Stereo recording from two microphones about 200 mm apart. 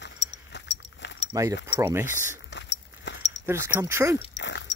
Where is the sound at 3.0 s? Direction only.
60° left (ahead or behind).